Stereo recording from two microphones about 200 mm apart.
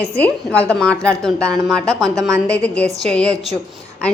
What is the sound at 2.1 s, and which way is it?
Speech, 15° right (ahead or behind).